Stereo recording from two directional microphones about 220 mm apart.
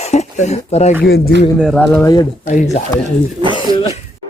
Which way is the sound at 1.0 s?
45° left (ahead or behind).